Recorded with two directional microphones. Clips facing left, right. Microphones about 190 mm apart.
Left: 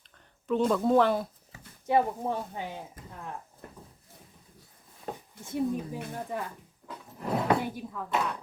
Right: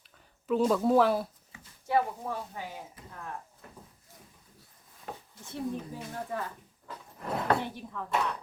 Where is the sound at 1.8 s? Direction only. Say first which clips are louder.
Left 3 dB; 20° left (ahead or behind).